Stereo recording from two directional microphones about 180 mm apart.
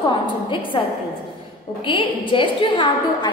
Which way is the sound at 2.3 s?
25° left (ahead or behind).